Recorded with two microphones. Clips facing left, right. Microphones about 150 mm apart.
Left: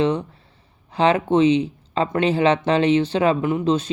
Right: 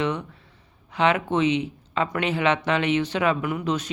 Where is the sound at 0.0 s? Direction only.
30° left (ahead or behind).